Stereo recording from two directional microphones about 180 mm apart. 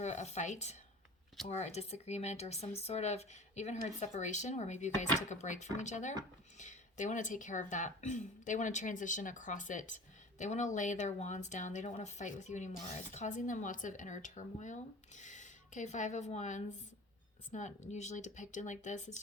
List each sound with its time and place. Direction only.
0.0 s speech: 40° left (ahead or behind)